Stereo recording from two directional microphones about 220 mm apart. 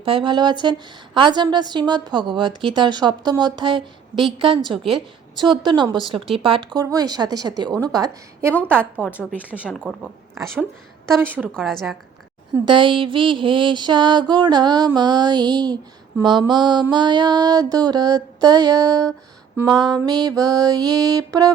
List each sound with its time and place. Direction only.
0.0 s mantra: 25° right (ahead or behind)
4.8 s speech: centre (ahead or behind)
5.4 s mantra: 20° right (ahead or behind)
7.8 s a sound: 15° right (ahead or behind)
9.1 s speech: 5° right (ahead or behind)
11.2 s speech: 5° right (ahead or behind)
12.5 s mantra: 20° right (ahead or behind)
16.9 s a sound: 20° right (ahead or behind)
19.5 s speech: centre (ahead or behind)
19.9 s a sound: 20° right (ahead or behind)